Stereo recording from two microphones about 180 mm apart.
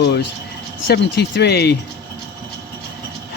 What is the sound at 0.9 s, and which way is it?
Speech, 70° left (ahead or behind).